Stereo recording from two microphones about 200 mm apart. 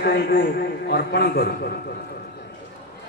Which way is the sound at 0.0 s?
50° left (ahead or behind).